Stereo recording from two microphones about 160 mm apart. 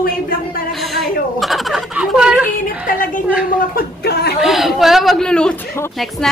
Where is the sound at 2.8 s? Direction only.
60° left (ahead or behind); by 4.3 s 75° left (ahead or behind).